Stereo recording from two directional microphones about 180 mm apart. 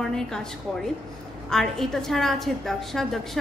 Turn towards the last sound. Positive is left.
turn(degrees=0)  # may be behind; listen again after turning